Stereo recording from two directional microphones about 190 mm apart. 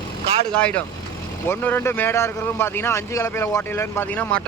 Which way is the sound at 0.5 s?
5° left (ahead or behind).